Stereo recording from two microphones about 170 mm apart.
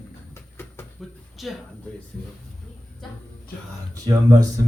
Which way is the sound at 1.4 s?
Centre (ahead or behind).